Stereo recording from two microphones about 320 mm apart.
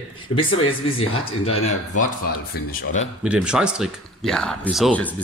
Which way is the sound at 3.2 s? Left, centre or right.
Centre.